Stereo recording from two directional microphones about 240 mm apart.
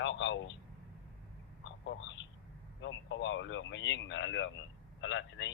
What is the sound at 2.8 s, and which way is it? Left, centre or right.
Speech, left.